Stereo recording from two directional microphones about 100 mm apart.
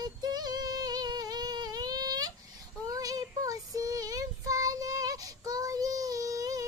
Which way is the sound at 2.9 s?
35° right (ahead or behind).